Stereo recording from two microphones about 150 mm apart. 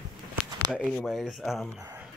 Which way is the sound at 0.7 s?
Centre (ahead or behind).